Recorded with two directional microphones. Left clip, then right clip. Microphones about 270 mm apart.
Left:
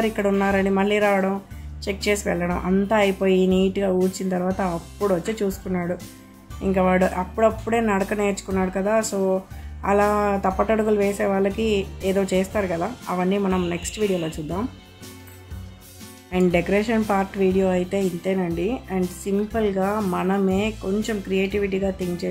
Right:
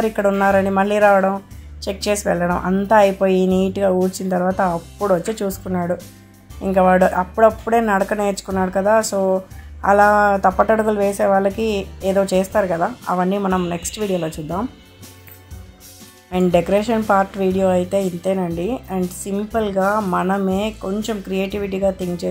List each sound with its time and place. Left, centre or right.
0.0 s speech: centre
16.3 s speech: centre